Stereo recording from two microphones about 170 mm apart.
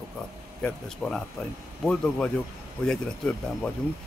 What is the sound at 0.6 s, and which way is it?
Speech, 5° left (ahead or behind).